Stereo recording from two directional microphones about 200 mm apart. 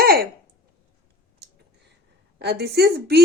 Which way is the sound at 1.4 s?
55° right (ahead or behind).